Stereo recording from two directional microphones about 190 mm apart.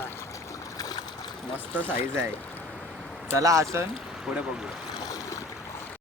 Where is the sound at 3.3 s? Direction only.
15° right (ahead or behind).